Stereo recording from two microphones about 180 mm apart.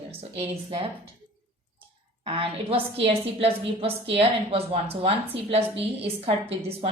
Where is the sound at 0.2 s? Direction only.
35° right (ahead or behind).